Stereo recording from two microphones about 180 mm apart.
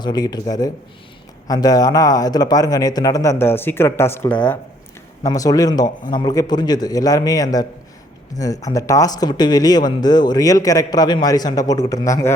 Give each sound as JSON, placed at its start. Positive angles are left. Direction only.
{"t": 0.0, "sound": "speech", "side_deg": 25}